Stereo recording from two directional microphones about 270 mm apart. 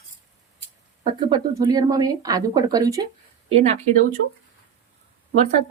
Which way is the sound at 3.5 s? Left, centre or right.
Right.